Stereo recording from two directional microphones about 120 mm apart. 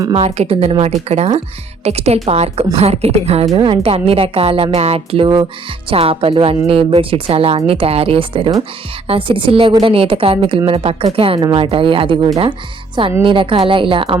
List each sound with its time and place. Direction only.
0.1 s speech: 60° right (ahead or behind)
3.5 s speech: 50° right (ahead or behind)